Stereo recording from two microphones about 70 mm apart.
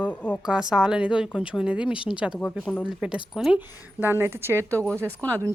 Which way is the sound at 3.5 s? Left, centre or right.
Right.